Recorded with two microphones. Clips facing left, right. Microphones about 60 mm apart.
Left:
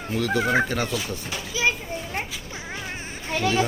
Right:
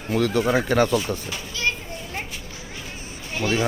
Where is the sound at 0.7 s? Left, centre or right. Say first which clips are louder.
Right 7 dB; right.